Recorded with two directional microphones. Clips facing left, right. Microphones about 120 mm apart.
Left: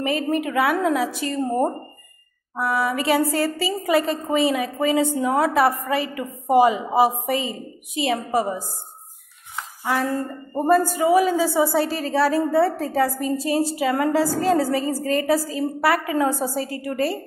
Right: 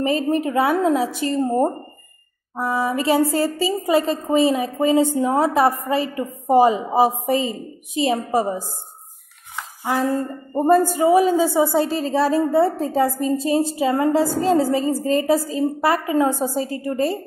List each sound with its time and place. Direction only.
0.0 s a woman's voice: 35° right (ahead or behind)
9.8 s a woman's voice: 20° right (ahead or behind)